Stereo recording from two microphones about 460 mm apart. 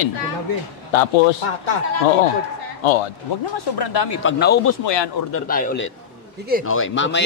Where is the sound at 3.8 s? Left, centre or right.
Left.